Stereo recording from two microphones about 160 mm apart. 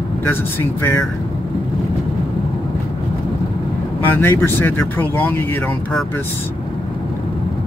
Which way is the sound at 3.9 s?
15° left (ahead or behind).